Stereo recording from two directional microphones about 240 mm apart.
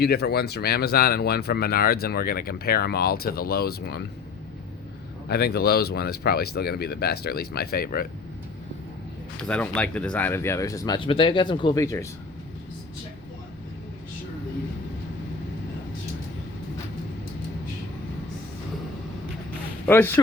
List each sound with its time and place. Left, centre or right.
0.0 s speech: left
5.3 s speech: left
9.4 s speech: centre
19.9 s speech: centre